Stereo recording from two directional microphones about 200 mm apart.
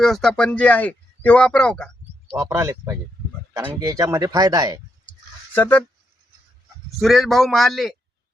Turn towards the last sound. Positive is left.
turn(degrees=0)  # may be behind; listen again after turning